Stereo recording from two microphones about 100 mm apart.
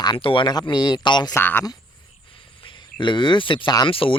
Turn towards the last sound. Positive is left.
turn(degrees=65)  # may be behind; listen again after turning